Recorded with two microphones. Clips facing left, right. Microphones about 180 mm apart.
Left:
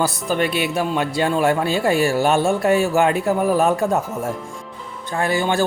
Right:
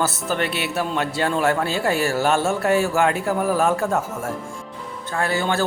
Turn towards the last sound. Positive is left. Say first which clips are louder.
# left 2 dB
turn(degrees=15)  # may be behind; listen again after turning